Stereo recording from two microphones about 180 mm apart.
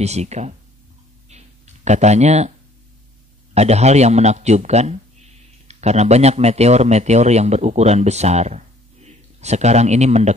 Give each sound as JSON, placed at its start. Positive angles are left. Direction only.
{"t": 0.0, "sound": "a man's voice", "side_deg": -35}
{"t": 1.9, "sound": "a man's voice", "side_deg": -40}
{"t": 3.5, "sound": "a man's voice", "side_deg": -35}